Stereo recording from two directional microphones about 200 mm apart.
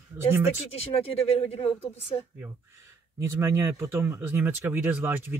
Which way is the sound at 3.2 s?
15° right (ahead or behind).